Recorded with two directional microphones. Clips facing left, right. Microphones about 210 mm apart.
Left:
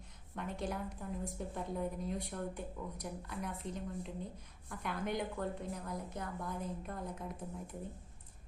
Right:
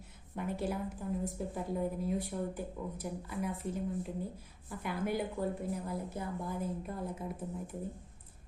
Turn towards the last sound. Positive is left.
turn(degrees=-5)  # may be behind; listen again after turning